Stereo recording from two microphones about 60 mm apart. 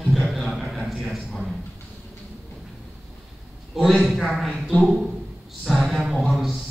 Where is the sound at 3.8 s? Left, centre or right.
Centre.